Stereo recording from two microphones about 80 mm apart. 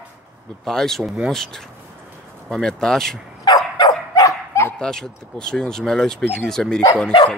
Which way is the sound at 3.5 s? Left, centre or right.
Left.